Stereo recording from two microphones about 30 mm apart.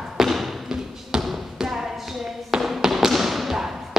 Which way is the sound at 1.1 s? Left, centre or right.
Right.